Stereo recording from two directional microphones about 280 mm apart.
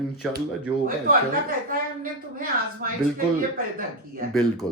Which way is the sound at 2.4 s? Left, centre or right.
Right.